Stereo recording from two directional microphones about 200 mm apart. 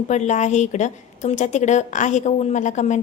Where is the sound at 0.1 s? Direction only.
35° left (ahead or behind).